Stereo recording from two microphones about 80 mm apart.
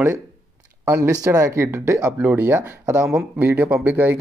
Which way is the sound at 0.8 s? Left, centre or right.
Right.